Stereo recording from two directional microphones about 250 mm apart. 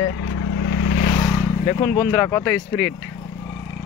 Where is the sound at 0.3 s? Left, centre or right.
Left.